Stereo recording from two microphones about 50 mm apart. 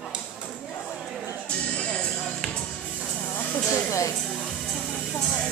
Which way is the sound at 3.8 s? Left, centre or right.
Left.